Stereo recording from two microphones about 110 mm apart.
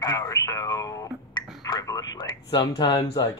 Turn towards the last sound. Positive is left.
turn(degrees=40)  # may be behind; listen again after turning